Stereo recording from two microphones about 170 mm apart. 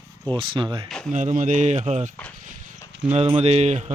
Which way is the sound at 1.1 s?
45° right (ahead or behind).